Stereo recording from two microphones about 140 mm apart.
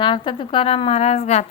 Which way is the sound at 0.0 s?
35° left (ahead or behind).